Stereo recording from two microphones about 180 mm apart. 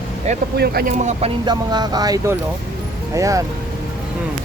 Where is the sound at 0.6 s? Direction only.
60° right (ahead or behind).